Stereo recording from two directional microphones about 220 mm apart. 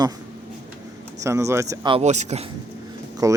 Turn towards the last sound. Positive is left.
turn(degrees=-15)  # may be behind; listen again after turning